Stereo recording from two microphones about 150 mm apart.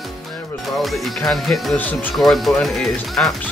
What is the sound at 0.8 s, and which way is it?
Speech, centre (ahead or behind).